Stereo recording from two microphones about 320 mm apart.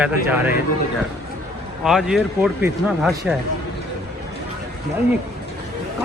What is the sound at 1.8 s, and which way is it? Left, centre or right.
Speech, centre.